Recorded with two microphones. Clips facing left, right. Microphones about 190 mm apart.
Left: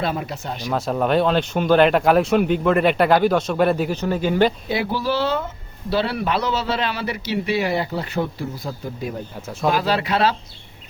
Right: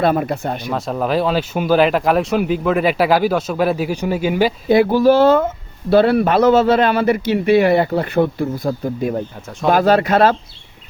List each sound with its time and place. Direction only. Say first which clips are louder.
0.0 s speech: right 8 dB; 55° right (ahead or behind)
0.7 s speech: left 1 dB; centre (ahead or behind)
4.7 s speech: right 11 dB; 50° right (ahead or behind)